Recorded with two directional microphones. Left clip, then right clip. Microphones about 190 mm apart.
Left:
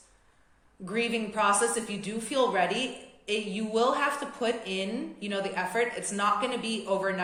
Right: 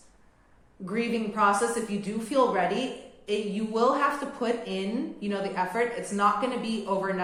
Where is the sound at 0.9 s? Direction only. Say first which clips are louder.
Even; 35° left (ahead or behind).